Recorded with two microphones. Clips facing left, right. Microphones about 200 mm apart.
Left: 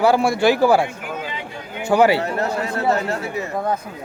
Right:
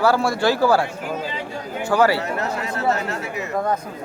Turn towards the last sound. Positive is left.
turn(degrees=35)  # may be behind; listen again after turning